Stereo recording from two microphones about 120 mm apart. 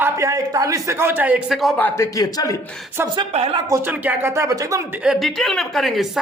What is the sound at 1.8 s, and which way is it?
Speech, 25° left (ahead or behind).